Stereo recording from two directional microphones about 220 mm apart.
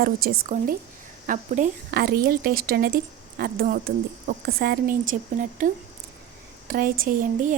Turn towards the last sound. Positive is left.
turn(degrees=-35)  # may be behind; listen again after turning